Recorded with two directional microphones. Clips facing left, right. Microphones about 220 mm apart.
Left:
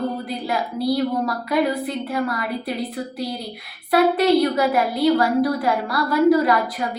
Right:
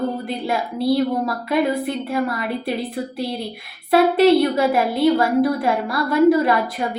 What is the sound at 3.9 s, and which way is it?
A woman's voice, 25° right (ahead or behind).